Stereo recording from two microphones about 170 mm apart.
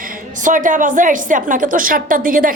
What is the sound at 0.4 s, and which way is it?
A woman's voice, 50° right (ahead or behind).